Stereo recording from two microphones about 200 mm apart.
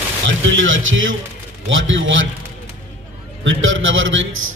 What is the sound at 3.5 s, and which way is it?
Speech, 70° right (ahead or behind).